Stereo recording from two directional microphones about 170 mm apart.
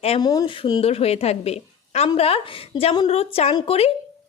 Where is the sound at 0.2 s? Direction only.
20° left (ahead or behind).